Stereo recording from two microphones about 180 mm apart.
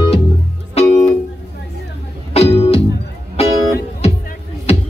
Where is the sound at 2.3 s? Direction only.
35° left (ahead or behind).